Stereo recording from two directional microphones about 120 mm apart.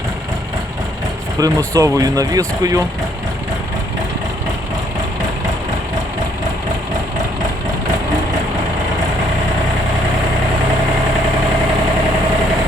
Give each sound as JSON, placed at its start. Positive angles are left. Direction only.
{"t": 1.4, "sound": "speech", "side_deg": -30}